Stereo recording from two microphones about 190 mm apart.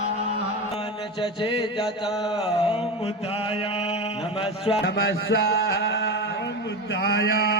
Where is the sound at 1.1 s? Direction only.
25° left (ahead or behind).